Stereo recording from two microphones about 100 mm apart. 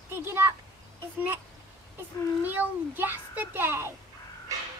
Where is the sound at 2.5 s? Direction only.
20° right (ahead or behind).